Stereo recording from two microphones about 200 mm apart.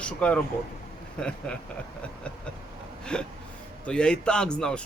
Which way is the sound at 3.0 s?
5° left (ahead or behind).